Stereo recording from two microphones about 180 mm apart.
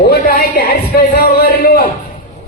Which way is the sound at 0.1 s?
55° left (ahead or behind).